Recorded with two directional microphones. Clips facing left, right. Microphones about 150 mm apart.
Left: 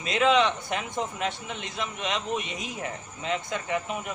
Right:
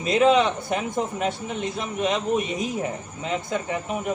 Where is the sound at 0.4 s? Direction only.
40° right (ahead or behind).